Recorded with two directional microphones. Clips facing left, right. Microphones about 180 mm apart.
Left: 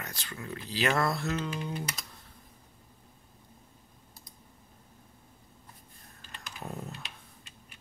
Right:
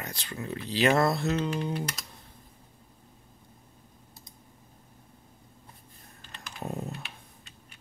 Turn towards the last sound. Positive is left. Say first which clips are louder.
# right 5 dB
turn(degrees=-20)  # may be behind; listen again after turning